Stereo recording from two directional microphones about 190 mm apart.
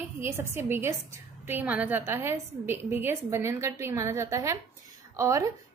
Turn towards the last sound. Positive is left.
turn(degrees=-15)  # may be behind; listen again after turning